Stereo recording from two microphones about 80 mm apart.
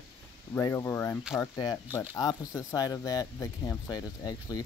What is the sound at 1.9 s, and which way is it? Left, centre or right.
Speech, left.